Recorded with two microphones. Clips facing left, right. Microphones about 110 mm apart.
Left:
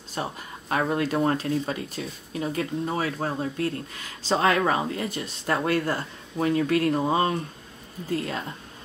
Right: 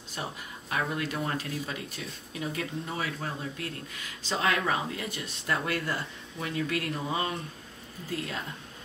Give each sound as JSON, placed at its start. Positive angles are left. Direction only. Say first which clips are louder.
{"t": 0.1, "sound": "speech", "louder": "left 6 dB", "side_deg": 35}